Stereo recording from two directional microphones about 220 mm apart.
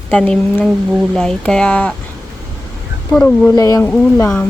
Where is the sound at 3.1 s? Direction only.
5° left (ahead or behind).